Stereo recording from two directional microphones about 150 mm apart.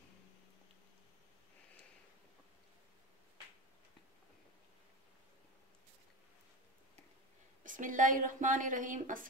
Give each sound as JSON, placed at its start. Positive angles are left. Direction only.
{"t": 7.6, "sound": "speech", "side_deg": -60}